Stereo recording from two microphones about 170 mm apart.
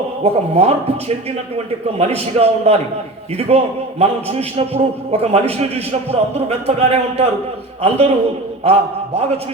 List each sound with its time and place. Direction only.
0.2 s a man's voice: 35° right (ahead or behind)